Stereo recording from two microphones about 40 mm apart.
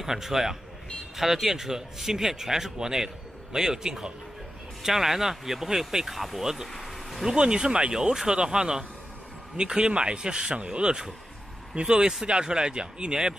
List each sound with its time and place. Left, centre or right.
0.0 s speech: centre
6.7 s a sound: centre
7.2 s speech: centre